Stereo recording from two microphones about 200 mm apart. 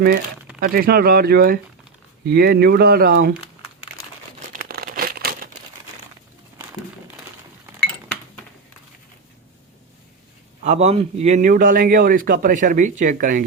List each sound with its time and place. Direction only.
0.6 s speech: 50° right (ahead or behind)
4.5 s crumpling: 50° right (ahead or behind)
10.6 s a man's voice: 35° right (ahead or behind)